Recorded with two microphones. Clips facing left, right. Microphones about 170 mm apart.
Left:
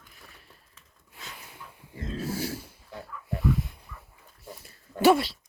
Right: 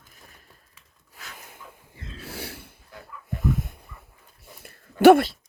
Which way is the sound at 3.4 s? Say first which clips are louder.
Right 1 dB; 50° right (ahead or behind).